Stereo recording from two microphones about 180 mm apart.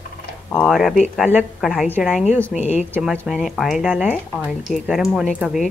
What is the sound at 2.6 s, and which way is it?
Speech, 40° left (ahead or behind).